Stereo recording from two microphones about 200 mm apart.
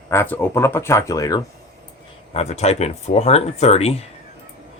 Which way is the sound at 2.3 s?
30° left (ahead or behind).